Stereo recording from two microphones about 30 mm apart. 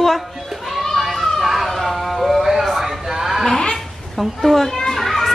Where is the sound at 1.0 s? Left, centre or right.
Centre.